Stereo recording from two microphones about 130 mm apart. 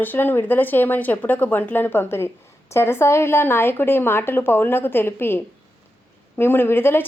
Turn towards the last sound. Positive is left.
turn(degrees=15)  # may be behind; listen again after turning